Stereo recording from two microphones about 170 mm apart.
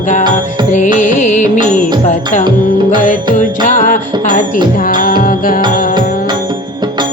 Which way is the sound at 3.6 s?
50° left (ahead or behind).